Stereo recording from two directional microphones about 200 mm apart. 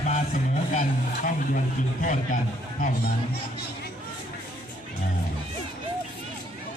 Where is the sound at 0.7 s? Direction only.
40° left (ahead or behind).